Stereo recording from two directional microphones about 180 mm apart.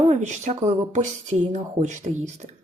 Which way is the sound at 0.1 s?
40° right (ahead or behind).